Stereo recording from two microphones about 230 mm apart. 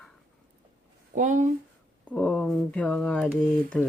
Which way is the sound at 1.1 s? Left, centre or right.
Right.